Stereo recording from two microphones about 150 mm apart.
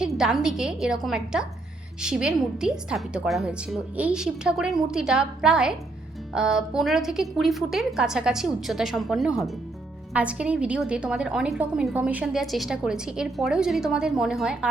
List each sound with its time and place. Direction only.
0.0 s a woman's voice: 5° right (ahead or behind)